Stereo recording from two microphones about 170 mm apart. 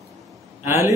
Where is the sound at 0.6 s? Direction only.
15° right (ahead or behind).